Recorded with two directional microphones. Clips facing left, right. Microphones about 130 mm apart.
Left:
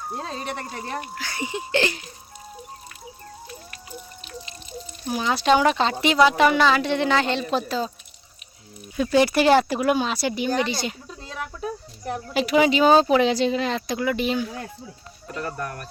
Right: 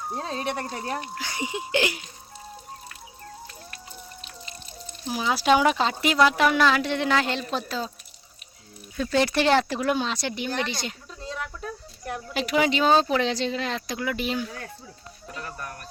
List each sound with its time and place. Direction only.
0.1 s speech: centre (ahead or behind)
1.2 s a sound: 15° right (ahead or behind)
5.0 s speech: 5° right (ahead or behind)
9.0 s speech: 15° left (ahead or behind)
12.2 s speech: centre (ahead or behind)
15.4 s speech: 75° left (ahead or behind)